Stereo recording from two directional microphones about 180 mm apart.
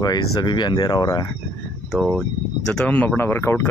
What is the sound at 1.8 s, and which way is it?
Speech, centre (ahead or behind).